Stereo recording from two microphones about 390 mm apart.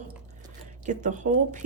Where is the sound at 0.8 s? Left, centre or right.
Centre.